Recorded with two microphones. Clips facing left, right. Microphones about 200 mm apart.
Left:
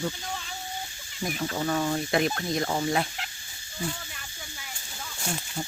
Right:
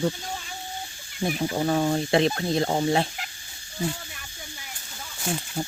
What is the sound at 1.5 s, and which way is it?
Speech, 35° right (ahead or behind).